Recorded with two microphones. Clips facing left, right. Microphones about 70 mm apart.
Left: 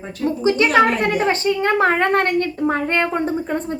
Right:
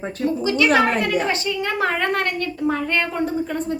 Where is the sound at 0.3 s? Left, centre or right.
Left.